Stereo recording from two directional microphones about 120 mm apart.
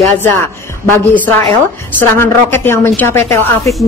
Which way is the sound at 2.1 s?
20° left (ahead or behind).